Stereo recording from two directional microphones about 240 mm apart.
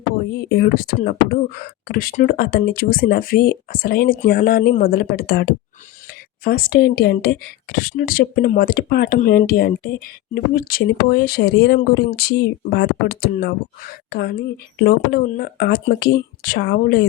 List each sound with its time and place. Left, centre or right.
0.3 s speech: left